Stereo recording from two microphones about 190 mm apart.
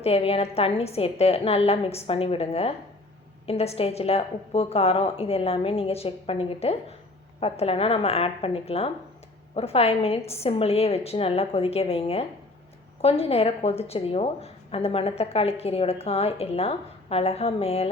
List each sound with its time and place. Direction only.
0.0 s a woman's voice: 30° left (ahead or behind)